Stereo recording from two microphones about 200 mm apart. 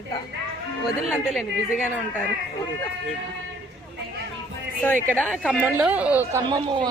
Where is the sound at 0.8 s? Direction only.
Centre (ahead or behind).